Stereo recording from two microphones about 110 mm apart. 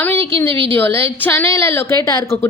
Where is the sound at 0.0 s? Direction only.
20° left (ahead or behind).